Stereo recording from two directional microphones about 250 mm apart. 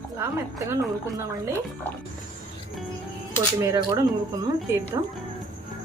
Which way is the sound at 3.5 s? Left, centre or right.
Centre.